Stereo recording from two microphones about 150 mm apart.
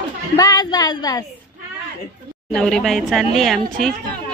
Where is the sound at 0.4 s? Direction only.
25° left (ahead or behind).